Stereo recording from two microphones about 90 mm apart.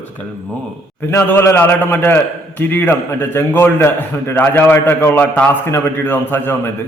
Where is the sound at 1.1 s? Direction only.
30° left (ahead or behind).